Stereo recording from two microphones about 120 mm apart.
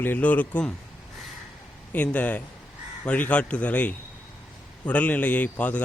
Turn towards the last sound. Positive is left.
turn(degrees=10)  # may be behind; listen again after turning